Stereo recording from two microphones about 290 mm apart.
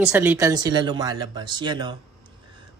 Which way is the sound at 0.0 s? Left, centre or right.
Centre.